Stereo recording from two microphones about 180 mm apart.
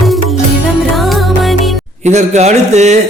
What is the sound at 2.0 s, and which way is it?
Speech, 40° right (ahead or behind).